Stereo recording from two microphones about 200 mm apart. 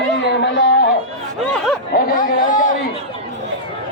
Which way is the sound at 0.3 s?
55° left (ahead or behind).